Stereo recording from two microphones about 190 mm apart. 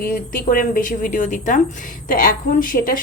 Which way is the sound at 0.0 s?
50° left (ahead or behind).